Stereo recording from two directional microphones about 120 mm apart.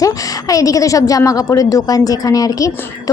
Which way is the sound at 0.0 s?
30° left (ahead or behind).